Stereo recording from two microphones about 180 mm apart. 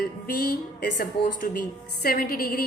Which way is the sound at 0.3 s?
55° left (ahead or behind).